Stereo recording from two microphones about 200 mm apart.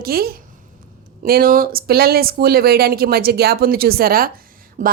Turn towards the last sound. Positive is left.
turn(degrees=-45)  # may be behind; listen again after turning